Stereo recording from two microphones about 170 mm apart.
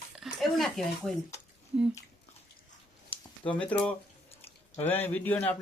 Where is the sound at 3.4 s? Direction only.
10° left (ahead or behind).